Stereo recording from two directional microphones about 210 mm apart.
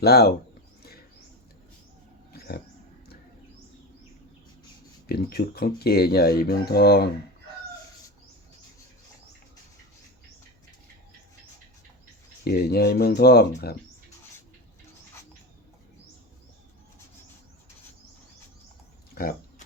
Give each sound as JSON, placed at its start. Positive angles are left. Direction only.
{"t": 0.0, "sound": "speech", "side_deg": 50}
{"t": 0.8, "sound": "a sound", "side_deg": 45}
{"t": 2.3, "sound": "dog", "side_deg": 50}
{"t": 5.0, "sound": "speech", "side_deg": 50}
{"t": 12.5, "sound": "speech", "side_deg": 50}
{"t": 19.1, "sound": "a sound", "side_deg": 45}